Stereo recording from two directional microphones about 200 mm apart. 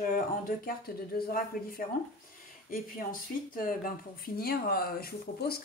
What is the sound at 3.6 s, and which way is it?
Speech, 45° left (ahead or behind).